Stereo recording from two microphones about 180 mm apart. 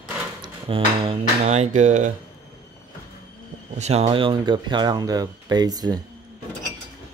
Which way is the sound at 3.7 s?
35° right (ahead or behind).